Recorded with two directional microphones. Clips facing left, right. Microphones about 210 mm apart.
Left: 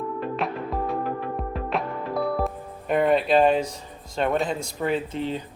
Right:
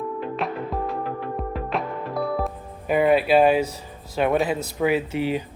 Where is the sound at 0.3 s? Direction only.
Centre (ahead or behind).